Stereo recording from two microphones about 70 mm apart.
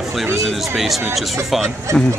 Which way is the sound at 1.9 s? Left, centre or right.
Right.